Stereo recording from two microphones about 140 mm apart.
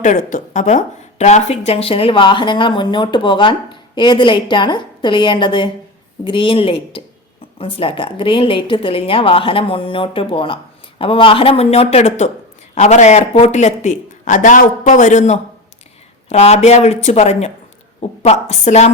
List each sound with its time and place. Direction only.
0.0 s speech: 65° left (ahead or behind)
16.3 s speech: 50° left (ahead or behind)